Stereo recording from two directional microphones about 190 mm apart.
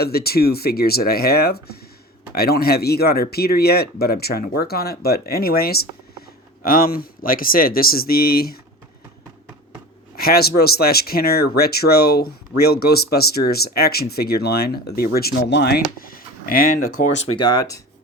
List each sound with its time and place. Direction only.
0.0 s speech: 55° left (ahead or behind)
10.2 s speech: 55° left (ahead or behind)
16.0 s speech: 50° left (ahead or behind)